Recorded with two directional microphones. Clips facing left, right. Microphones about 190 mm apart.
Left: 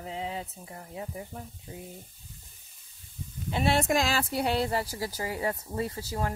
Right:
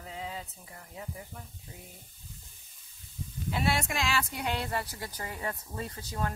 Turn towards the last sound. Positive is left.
turn(degrees=25)  # may be behind; listen again after turning